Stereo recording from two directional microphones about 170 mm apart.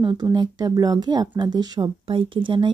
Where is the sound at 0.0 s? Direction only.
25° right (ahead or behind).